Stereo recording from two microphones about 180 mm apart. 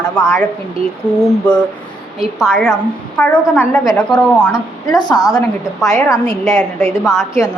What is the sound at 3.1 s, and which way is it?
Speech, 5° left (ahead or behind).